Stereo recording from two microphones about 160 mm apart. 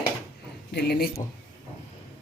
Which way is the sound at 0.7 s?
90° left.